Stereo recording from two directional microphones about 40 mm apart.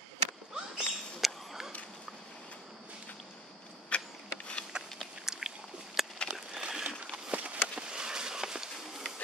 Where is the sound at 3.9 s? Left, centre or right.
Left.